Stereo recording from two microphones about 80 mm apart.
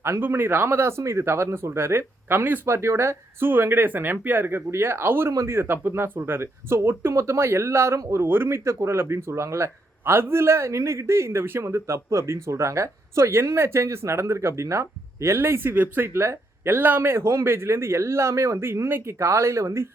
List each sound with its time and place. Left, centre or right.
0.0 s speech: right